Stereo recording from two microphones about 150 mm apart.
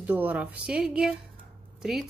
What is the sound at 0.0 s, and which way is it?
A woman's voice, 10° right (ahead or behind).